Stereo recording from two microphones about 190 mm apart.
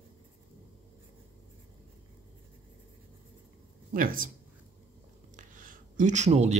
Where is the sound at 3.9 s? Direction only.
45° right (ahead or behind).